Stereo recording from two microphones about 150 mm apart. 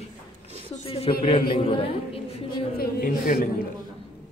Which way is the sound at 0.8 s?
40° left (ahead or behind).